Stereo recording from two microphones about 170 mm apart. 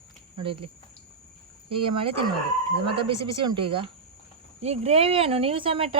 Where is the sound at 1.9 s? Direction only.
30° right (ahead or behind).